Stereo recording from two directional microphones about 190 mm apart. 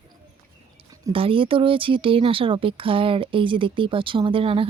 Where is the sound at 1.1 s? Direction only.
30° right (ahead or behind).